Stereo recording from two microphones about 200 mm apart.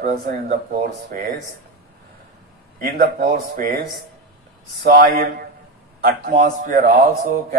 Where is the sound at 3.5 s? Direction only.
50° right (ahead or behind).